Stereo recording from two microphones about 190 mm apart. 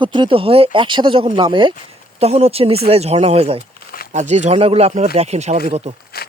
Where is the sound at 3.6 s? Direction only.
50° left (ahead or behind).